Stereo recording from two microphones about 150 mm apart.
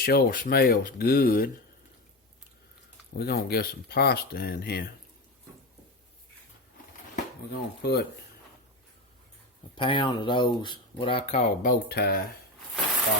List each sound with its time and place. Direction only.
0.0 s speech: 80° left
3.2 s speech: 90° left
7.5 s speech: 90° left
9.7 s speech: 35° left (ahead or behind); by 12.2 s 90° left